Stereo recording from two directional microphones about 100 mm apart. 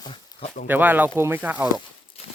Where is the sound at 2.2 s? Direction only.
80° left.